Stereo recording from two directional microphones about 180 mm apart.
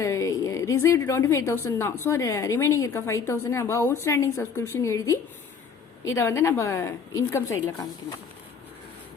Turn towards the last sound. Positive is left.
turn(degrees=15)  # may be behind; listen again after turning